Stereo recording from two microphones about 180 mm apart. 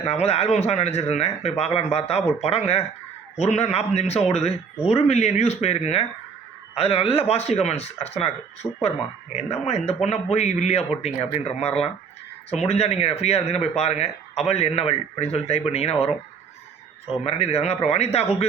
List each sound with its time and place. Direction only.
0.0 s speech: 35° left (ahead or behind)
8.6 s speech: 15° left (ahead or behind)
9.3 s speech: 35° left (ahead or behind)
17.2 s speech: 35° left (ahead or behind)